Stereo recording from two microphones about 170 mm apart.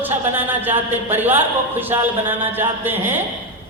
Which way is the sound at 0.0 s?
10° right (ahead or behind).